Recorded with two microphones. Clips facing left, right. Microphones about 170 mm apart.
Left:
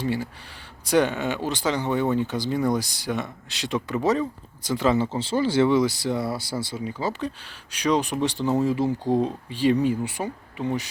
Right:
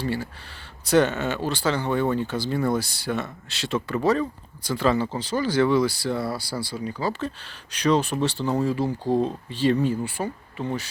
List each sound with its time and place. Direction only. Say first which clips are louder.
0.0 s speech: left 1 dB; 15° left (ahead or behind)